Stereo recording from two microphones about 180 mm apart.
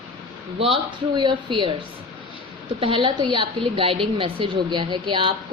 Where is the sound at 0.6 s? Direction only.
30° right (ahead or behind).